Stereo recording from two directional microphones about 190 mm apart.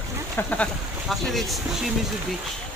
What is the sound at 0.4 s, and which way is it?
Speech, 5° left (ahead or behind).